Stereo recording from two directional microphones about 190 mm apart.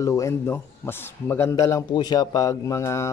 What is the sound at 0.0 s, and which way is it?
A man's voice, 15° left (ahead or behind).